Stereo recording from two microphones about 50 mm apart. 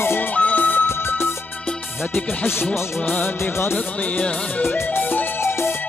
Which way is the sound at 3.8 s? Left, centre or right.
Left.